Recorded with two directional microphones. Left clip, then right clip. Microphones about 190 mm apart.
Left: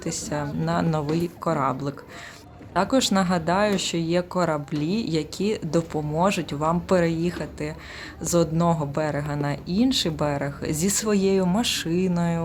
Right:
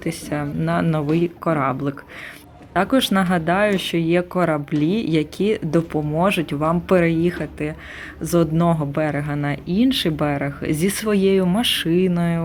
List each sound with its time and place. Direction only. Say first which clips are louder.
0.0 s speech: right 3 dB; 10° right (ahead or behind)